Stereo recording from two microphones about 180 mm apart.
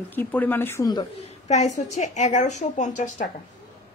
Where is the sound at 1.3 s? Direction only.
40° left (ahead or behind).